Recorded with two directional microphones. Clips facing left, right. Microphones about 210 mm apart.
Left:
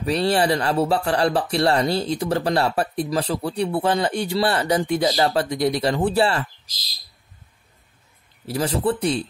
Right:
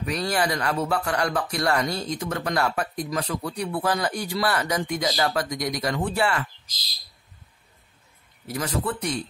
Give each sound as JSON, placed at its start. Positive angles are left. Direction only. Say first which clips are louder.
{"t": 0.0, "sound": "speech", "louder": "left 5 dB", "side_deg": 30}
{"t": 8.5, "sound": "speech", "louder": "left 6 dB", "side_deg": 30}